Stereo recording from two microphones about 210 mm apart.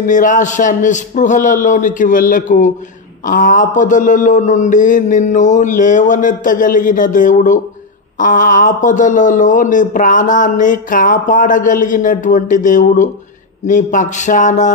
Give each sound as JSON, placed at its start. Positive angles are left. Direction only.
{"t": 0.0, "sound": "speech", "side_deg": 40}